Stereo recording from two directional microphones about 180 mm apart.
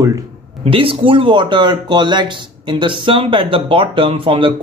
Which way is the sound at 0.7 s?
30° right (ahead or behind).